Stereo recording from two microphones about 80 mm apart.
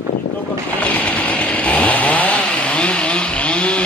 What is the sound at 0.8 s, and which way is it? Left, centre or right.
Chainsaw, centre.